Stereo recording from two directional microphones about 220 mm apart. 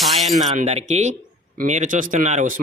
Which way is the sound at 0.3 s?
30° right (ahead or behind).